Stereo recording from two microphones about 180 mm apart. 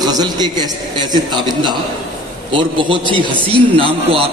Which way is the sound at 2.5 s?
30° right (ahead or behind).